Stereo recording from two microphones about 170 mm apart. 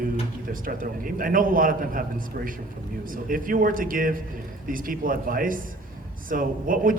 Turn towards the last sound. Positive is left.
turn(degrees=-55)  # may be behind; listen again after turning